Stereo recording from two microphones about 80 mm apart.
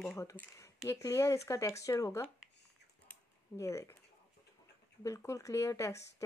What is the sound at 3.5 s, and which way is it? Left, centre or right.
Speech, left.